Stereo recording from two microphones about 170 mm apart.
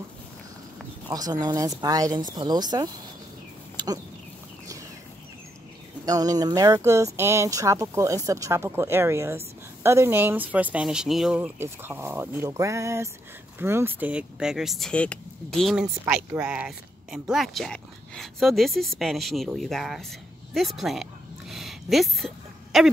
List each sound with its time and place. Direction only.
1.1 s speech: 20° right (ahead or behind)
3.7 s a sound: 20° right (ahead or behind)
6.0 s speech: 20° right (ahead or behind); by 22.8 s centre (ahead or behind)